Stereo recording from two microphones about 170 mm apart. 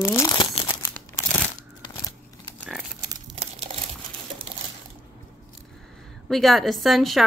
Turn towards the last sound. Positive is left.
turn(degrees=0)  # may be behind; listen again after turning